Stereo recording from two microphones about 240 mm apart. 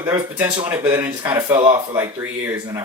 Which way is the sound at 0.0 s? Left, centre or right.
Centre.